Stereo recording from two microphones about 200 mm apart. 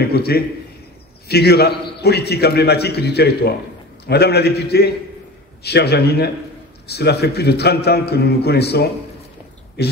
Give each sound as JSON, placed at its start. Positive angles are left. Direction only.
{"t": 0.1, "sound": "a man's voice", "side_deg": 50}